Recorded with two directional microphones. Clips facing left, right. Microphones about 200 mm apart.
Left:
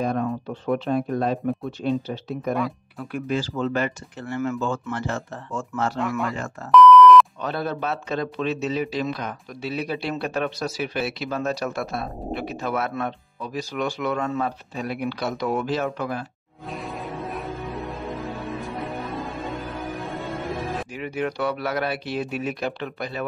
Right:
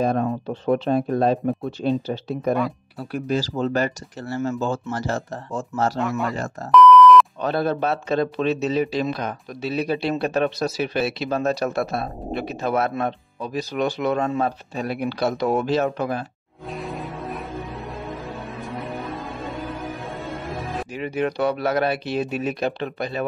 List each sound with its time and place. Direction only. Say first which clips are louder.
0.0 s speech: right 3 dB; 30° right (ahead or behind)
5.9 s speech: right 2 dB; centre (ahead or behind)
6.7 s beep: even; centre (ahead or behind)
7.4 s speech: right 5 dB; 30° right (ahead or behind)
16.7 s music: right 1 dB; centre (ahead or behind)
20.9 s speech: right 7 dB; 25° right (ahead or behind)